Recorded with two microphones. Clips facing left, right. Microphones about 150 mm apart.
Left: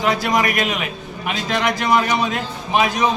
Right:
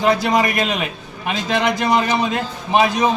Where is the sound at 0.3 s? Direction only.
30° right (ahead or behind).